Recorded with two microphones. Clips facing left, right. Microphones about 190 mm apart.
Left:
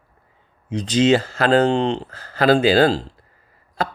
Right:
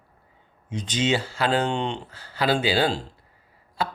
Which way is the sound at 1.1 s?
40° left (ahead or behind).